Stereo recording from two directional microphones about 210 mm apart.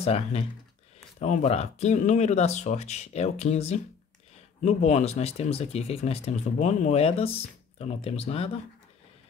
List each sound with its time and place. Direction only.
0.0 s speech: 30° left (ahead or behind)